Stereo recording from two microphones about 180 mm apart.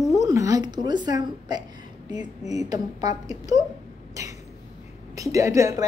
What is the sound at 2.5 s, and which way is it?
Speech, 20° right (ahead or behind).